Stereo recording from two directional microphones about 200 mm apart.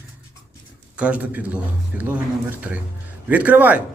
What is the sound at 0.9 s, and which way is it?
Speech, 5° right (ahead or behind).